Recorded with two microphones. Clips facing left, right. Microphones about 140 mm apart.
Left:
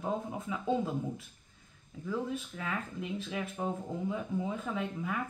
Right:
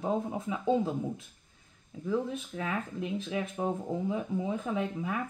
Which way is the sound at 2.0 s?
25° right (ahead or behind).